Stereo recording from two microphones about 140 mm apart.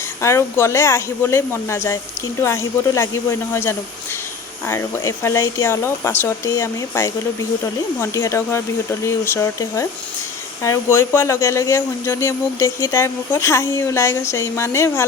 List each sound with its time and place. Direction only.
0.2 s speech: 20° left (ahead or behind)
10.9 s speech: 20° left (ahead or behind)